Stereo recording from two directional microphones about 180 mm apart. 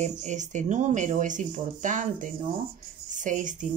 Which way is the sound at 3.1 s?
45° right (ahead or behind).